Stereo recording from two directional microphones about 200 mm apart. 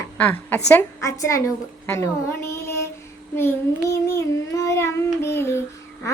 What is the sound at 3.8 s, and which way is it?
A woman's voice, 15° left (ahead or behind).